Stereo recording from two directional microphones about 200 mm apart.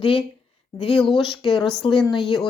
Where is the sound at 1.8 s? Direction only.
25° left (ahead or behind).